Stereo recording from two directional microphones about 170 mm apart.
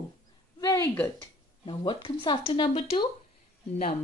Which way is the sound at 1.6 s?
30° left (ahead or behind).